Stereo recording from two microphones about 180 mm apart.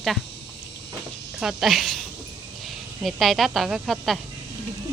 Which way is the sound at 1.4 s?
Centre (ahead or behind).